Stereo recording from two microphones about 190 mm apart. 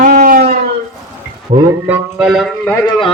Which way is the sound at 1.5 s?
35° right (ahead or behind).